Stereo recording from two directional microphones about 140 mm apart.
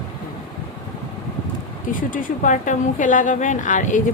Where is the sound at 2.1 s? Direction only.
65° left (ahead or behind).